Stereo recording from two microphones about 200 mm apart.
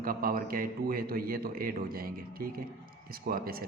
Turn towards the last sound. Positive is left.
turn(degrees=-45)  # may be behind; listen again after turning